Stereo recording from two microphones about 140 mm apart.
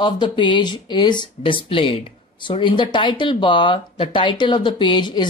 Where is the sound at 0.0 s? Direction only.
35° left (ahead or behind).